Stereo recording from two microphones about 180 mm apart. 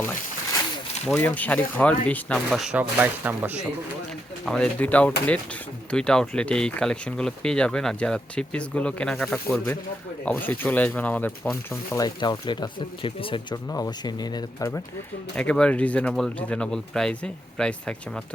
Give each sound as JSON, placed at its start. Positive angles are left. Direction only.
{"t": 0.0, "sound": "a sound", "side_deg": 15}
{"t": 1.0, "sound": "speech", "side_deg": 10}
{"t": 4.4, "sound": "speech", "side_deg": 5}
{"t": 15.4, "sound": "speech", "side_deg": 5}